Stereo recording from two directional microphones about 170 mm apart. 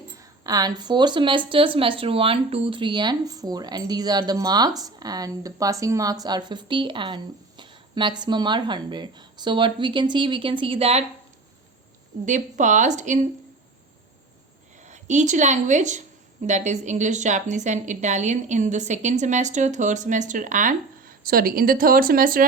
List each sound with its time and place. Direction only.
0.2 s speech: 20° right (ahead or behind)
12.2 s a woman's voice: 45° right (ahead or behind)
14.8 s a woman's voice: 45° right (ahead or behind)